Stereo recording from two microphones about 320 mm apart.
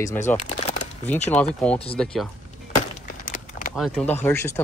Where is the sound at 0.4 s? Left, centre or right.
Centre.